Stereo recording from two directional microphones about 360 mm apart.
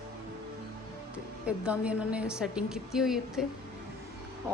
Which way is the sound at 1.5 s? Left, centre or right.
Centre.